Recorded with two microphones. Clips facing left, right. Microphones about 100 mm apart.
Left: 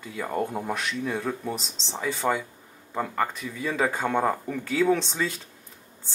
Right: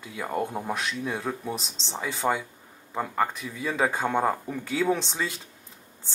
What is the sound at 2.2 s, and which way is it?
Speech, 5° right (ahead or behind).